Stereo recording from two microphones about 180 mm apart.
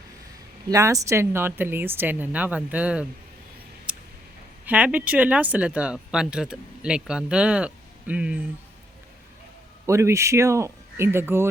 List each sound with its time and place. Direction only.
0.7 s speech: 20° right (ahead or behind)
3.9 s a sound: 5° right (ahead or behind)
4.6 s speech: 10° right (ahead or behind)
9.8 s speech: 15° right (ahead or behind)